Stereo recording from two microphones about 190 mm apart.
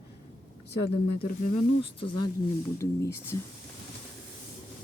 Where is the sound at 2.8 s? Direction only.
15° left (ahead or behind).